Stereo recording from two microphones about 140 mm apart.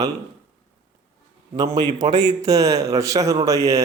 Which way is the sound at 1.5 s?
30° right (ahead or behind).